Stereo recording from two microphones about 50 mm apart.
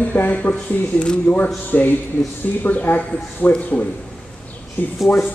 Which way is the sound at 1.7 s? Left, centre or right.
Left.